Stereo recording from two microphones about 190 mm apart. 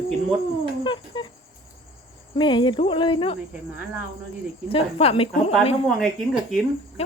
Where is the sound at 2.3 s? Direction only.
25° left (ahead or behind).